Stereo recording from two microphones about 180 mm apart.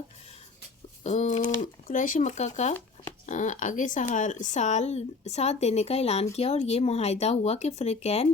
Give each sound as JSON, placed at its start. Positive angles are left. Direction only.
{"t": 1.0, "sound": "speech", "side_deg": 40}